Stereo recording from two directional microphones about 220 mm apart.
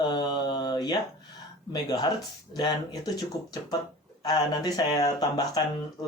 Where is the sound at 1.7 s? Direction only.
20° left (ahead or behind).